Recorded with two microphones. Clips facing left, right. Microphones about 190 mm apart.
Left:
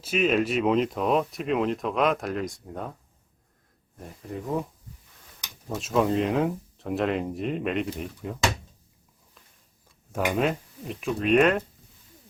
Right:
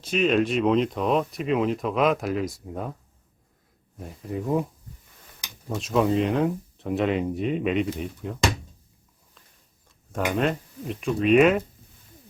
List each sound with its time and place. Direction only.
0.0 s speech: 5° left (ahead or behind)
3.9 s speech: 5° right (ahead or behind)
5.6 s speech: centre (ahead or behind)
10.1 s speech: 5° left (ahead or behind)